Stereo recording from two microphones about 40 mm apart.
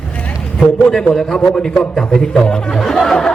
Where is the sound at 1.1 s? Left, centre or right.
Centre.